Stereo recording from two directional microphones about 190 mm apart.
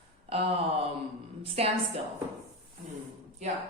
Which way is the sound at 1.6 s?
35° right (ahead or behind).